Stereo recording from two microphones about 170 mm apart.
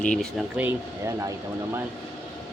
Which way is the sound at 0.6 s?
15° right (ahead or behind).